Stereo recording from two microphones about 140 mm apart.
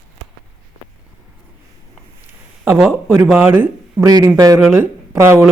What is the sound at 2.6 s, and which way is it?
Speech, 15° right (ahead or behind).